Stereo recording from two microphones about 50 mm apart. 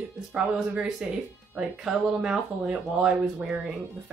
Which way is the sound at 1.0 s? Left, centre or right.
Centre.